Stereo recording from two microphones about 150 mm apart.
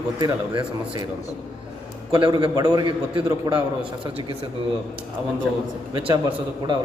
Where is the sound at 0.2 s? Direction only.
25° right (ahead or behind).